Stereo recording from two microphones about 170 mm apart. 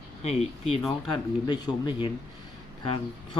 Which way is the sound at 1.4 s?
25° left (ahead or behind).